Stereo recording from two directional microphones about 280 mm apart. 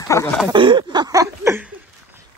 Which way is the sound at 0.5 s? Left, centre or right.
Centre.